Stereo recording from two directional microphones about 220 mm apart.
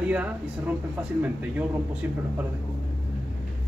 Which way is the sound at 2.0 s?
10° right (ahead or behind).